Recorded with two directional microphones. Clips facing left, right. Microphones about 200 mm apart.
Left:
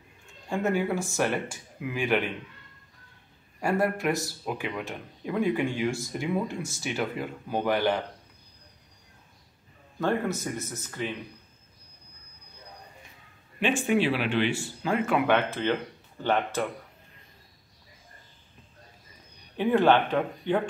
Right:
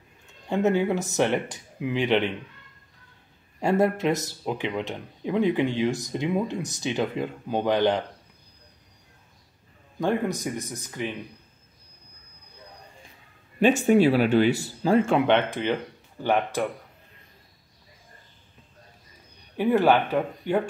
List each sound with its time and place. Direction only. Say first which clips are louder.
0.5 s speech: right 4 dB; 20° right (ahead or behind)
3.6 s speech: right 4 dB; 20° right (ahead or behind)
9.9 s speech: right 2 dB; 15° right (ahead or behind)
13.6 s speech: right 6 dB; 40° right (ahead or behind); by 16.6 s 10° right (ahead or behind)
19.5 s speech: right 1 dB; 10° right (ahead or behind)